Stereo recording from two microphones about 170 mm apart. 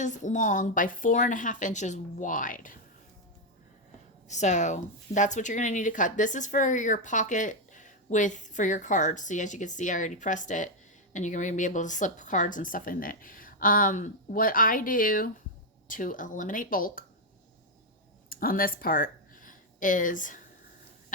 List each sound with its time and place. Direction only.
0.0 s speech: 45° left (ahead or behind)
4.3 s speech: 45° left (ahead or behind)
18.3 s speech: 55° left (ahead or behind)